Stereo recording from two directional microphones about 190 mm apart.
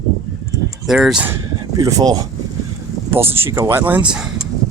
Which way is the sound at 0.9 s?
5° right (ahead or behind).